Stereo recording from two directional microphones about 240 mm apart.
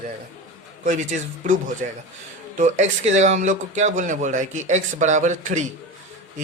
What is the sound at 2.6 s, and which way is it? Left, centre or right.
Speech, right.